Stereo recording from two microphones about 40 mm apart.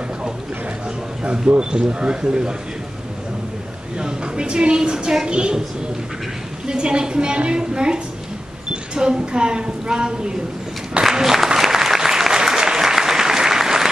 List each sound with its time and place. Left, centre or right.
1.2 s a woman's voice: right
4.0 s a woman's voice: right
6.7 s a woman's voice: right
11.1 s applause: centre